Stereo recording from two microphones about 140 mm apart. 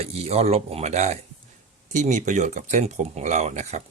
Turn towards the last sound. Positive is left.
turn(degrees=-55)  # may be behind; listen again after turning